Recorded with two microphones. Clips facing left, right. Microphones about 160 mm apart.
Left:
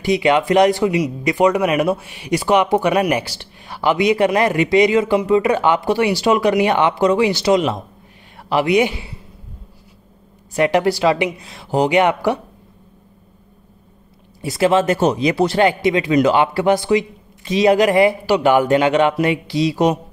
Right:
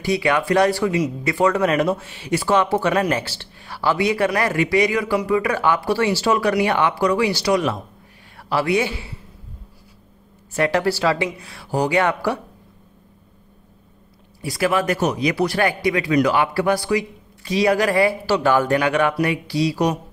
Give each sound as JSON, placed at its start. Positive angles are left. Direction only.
{"t": 0.0, "sound": "a man's voice", "side_deg": 20}
{"t": 10.5, "sound": "a man's voice", "side_deg": 20}
{"t": 14.4, "sound": "a man's voice", "side_deg": 25}